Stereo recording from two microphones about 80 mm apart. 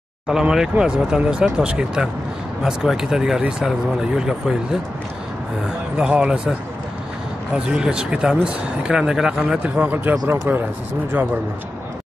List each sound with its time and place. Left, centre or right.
0.3 s speech: centre
5.9 s speech: centre
7.5 s speech: centre
9.6 s speech: right